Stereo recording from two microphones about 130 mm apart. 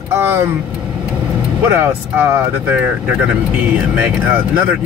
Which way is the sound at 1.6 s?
15° right (ahead or behind).